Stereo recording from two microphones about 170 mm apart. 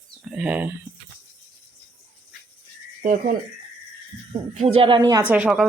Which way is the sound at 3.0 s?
50° right (ahead or behind).